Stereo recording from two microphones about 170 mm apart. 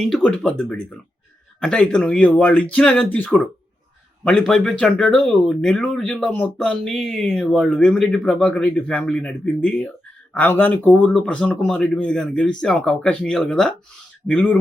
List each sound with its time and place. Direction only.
0.0 s speech: 5° left (ahead or behind)